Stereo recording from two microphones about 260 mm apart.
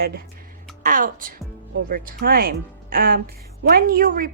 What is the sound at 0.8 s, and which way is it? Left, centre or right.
A woman's voice, right.